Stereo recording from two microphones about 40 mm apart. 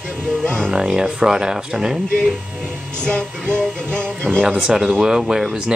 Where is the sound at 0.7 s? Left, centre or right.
Centre.